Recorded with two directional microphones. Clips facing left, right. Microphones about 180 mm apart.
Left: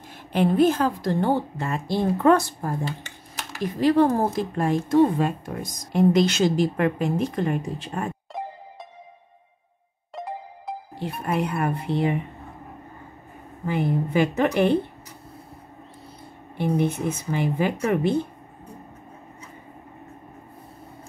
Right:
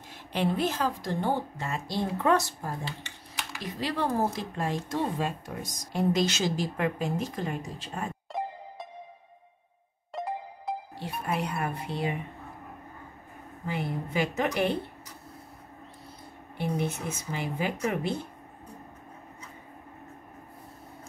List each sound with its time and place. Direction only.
0.3 s speech: 50° left (ahead or behind)
8.3 s music: centre (ahead or behind)
10.1 s music: centre (ahead or behind)
11.2 s speech: 55° left (ahead or behind)
13.7 s speech: 55° left (ahead or behind)
16.5 s speech: 55° left (ahead or behind)